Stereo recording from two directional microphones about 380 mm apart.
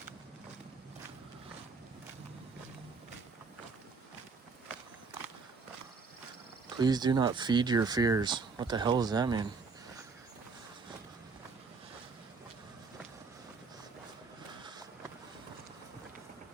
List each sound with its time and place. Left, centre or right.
6.7 s speech: centre